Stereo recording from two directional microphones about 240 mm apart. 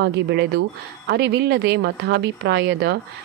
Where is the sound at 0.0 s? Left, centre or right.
Right.